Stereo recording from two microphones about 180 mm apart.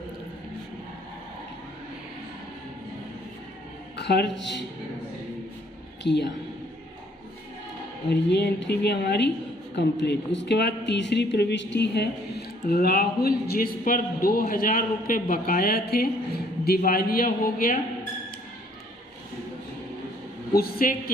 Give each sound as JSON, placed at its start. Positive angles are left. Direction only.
{"t": 3.9, "sound": "speech", "side_deg": 70}
{"t": 6.0, "sound": "a woman's voice", "side_deg": 70}
{"t": 8.1, "sound": "a woman's voice", "side_deg": 65}
{"t": 12.6, "sound": "a man's voice", "side_deg": 55}
{"t": 20.6, "sound": "a woman's voice", "side_deg": 55}